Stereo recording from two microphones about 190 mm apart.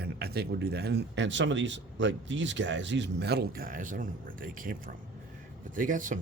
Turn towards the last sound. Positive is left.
turn(degrees=-45)  # may be behind; listen again after turning